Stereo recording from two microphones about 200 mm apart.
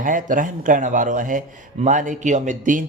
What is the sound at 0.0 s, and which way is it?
A man's voice, 40° right (ahead or behind).